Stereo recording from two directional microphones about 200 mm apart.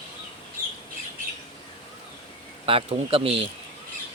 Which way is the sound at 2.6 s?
30° right (ahead or behind).